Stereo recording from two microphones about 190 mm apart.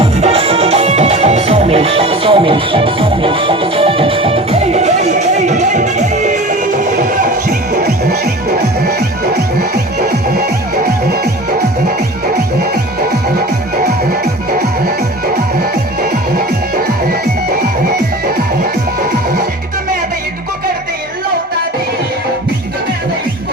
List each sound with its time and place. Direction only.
0.0 s music: 30° right (ahead or behind)
10.1 s music: 55° right (ahead or behind)